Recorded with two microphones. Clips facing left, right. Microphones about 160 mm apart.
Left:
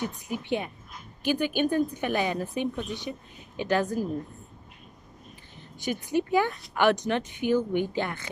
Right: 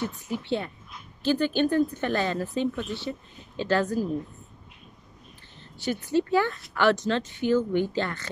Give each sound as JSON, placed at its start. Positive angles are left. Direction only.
{"t": 0.3, "sound": "speech", "side_deg": 15}
{"t": 5.6, "sound": "a sound", "side_deg": 15}
{"t": 6.0, "sound": "speech", "side_deg": 15}